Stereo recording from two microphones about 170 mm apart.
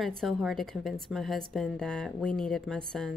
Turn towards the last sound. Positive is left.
turn(degrees=5)  # may be behind; listen again after turning